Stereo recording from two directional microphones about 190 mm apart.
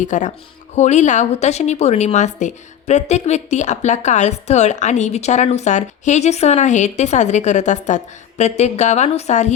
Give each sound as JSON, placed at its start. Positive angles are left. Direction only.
{"t": 0.0, "sound": "a woman's voice", "side_deg": 40}